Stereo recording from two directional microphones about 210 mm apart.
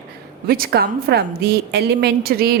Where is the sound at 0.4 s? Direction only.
45° right (ahead or behind).